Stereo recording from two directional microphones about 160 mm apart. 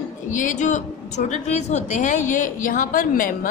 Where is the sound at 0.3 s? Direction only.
50° left (ahead or behind).